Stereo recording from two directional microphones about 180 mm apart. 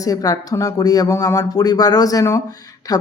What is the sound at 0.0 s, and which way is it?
A woman's voice, 20° left (ahead or behind).